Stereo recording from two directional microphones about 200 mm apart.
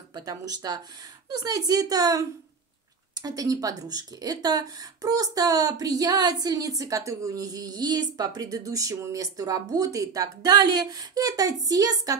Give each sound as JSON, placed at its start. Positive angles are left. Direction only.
{"t": 0.1, "sound": "speech", "side_deg": -20}